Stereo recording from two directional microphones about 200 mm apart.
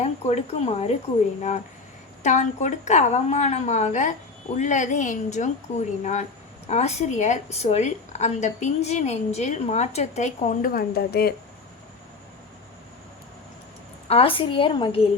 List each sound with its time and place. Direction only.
0.0 s a woman's voice: 30° left (ahead or behind); by 11.3 s 50° left (ahead or behind)
14.1 s a woman's voice: 25° left (ahead or behind)